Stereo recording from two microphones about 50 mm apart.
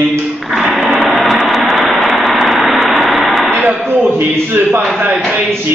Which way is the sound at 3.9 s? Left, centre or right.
Right.